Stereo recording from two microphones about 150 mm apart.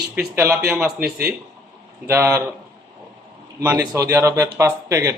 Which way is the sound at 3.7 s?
20° right (ahead or behind).